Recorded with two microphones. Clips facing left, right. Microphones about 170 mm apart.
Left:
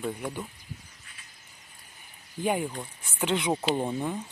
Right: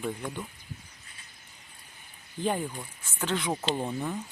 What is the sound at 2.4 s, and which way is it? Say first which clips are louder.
Speech: left 2 dB; 10° left (ahead or behind).